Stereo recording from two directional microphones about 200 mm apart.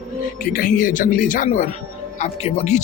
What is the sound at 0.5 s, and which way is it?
Speech, 45° left (ahead or behind).